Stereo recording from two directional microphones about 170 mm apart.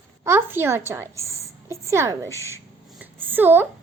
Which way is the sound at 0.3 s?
15° right (ahead or behind).